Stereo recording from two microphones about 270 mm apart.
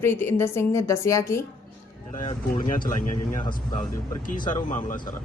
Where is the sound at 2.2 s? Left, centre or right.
Left.